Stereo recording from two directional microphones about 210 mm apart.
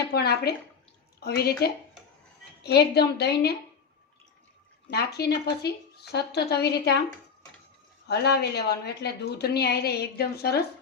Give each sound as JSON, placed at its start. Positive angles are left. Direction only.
{"t": 0.1, "sound": "a woman's voice", "side_deg": 50}
{"t": 4.9, "sound": "a woman's voice", "side_deg": 50}
{"t": 8.0, "sound": "a woman's voice", "side_deg": 50}